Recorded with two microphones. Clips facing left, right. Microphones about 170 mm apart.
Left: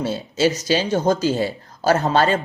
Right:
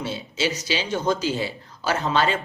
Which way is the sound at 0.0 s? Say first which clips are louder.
Left 7 dB; 45° left (ahead or behind).